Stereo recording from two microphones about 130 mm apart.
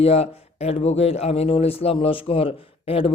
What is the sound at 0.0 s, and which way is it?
A man's voice, 50° left (ahead or behind).